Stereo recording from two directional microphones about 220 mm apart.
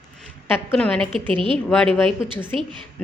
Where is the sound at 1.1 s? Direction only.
25° right (ahead or behind).